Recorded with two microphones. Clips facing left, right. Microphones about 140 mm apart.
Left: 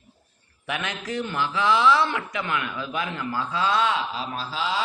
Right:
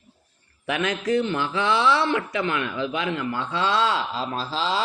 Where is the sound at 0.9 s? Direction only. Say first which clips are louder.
Right 10 dB; 25° right (ahead or behind).